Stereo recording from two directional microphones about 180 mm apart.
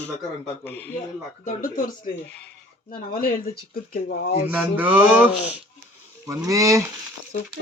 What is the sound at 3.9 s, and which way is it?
Speech, 55° left (ahead or behind).